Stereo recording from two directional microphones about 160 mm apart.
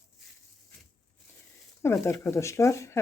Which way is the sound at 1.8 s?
15° left (ahead or behind).